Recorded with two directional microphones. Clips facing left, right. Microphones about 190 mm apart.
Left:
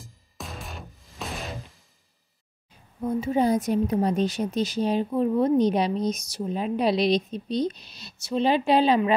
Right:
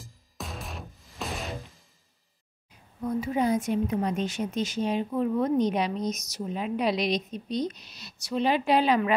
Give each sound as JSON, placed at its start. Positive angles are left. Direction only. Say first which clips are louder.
{"t": 0.0, "sound": "music", "louder": "even", "side_deg": 0}
{"t": 3.0, "sound": "a woman's voice", "louder": "left 3 dB", "side_deg": 25}